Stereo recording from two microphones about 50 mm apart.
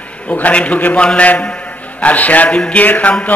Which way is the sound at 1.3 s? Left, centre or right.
Left.